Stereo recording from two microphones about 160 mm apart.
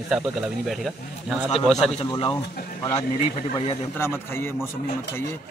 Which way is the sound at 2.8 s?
20° left (ahead or behind).